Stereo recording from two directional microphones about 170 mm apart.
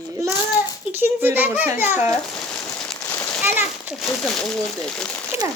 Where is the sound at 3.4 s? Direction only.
10° right (ahead or behind).